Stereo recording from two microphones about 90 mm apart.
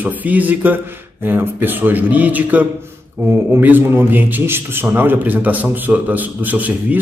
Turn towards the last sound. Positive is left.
turn(degrees=-20)  # may be behind; listen again after turning